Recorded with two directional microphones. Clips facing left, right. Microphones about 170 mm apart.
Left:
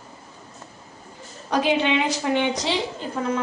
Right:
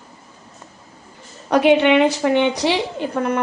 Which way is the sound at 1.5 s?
65° right (ahead or behind).